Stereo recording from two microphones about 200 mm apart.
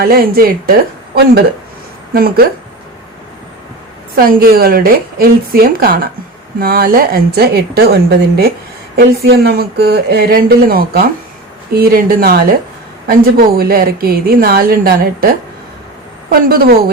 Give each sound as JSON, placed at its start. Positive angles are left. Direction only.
{"t": 0.0, "sound": "a woman's voice", "side_deg": -50}
{"t": 4.2, "sound": "a woman's voice", "side_deg": -45}
{"t": 16.3, "sound": "a woman's voice", "side_deg": -50}